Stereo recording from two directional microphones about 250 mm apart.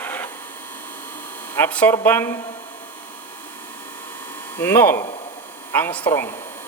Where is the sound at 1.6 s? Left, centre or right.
Centre.